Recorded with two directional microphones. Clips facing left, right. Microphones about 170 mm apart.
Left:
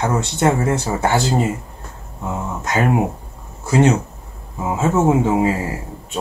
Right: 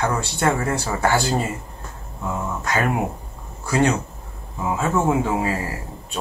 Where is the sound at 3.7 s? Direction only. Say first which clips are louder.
Left 4 dB; 20° left (ahead or behind).